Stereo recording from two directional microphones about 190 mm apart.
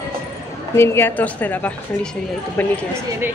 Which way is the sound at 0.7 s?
10° left (ahead or behind).